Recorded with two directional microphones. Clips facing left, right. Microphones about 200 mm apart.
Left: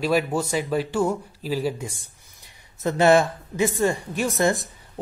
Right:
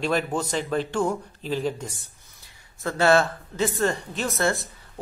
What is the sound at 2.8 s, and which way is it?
Speech, 20° left (ahead or behind).